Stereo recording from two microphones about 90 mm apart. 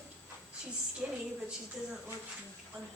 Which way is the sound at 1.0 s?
10° right (ahead or behind).